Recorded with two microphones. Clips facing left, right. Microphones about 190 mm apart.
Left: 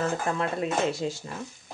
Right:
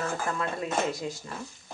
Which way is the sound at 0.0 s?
25° left (ahead or behind).